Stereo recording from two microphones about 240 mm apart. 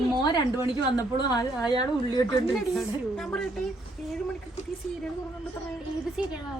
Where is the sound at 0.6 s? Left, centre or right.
Centre.